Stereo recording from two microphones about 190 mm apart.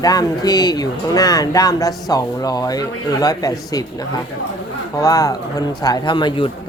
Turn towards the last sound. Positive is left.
turn(degrees=25)  # may be behind; listen again after turning